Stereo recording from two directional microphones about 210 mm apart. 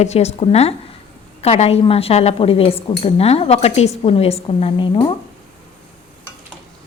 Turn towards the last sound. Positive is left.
turn(degrees=25)  # may be behind; listen again after turning